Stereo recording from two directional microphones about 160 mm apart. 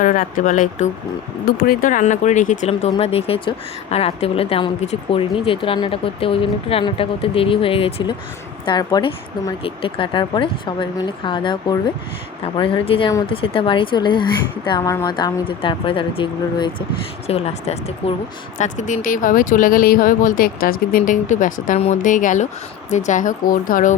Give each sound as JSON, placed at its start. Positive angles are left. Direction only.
{"t": 0.0, "sound": "speech", "side_deg": 55}
{"t": 1.5, "sound": "a woman's voice", "side_deg": 65}
{"t": 8.6, "sound": "a woman's voice", "side_deg": 25}
{"t": 17.2, "sound": "a woman's voice", "side_deg": 40}